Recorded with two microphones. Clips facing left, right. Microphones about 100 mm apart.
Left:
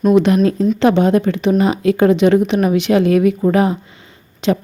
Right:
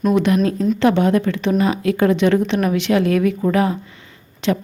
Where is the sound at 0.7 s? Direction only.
20° left (ahead or behind).